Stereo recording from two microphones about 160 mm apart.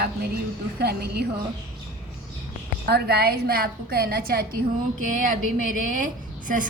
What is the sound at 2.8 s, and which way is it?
A woman's voice, 80° right.